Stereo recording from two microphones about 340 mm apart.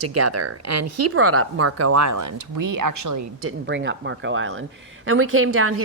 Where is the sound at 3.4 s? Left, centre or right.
Right.